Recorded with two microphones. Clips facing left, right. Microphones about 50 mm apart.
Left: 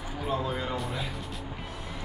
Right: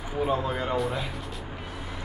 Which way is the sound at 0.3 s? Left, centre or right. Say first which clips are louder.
Right 1 dB; centre.